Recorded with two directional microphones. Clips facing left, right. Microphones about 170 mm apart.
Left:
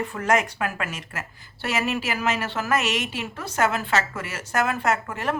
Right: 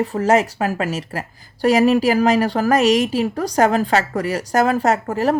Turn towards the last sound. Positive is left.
turn(degrees=-35)  # may be behind; listen again after turning